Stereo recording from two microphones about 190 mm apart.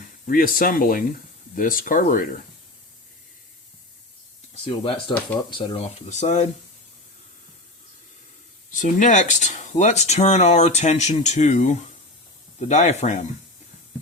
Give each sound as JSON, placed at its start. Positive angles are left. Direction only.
{"t": 0.3, "sound": "speech", "side_deg": 50}
{"t": 4.6, "sound": "speech", "side_deg": 25}
{"t": 8.7, "sound": "speech", "side_deg": 40}